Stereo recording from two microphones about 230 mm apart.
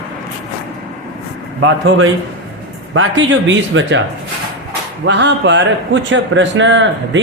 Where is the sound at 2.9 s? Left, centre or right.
Right.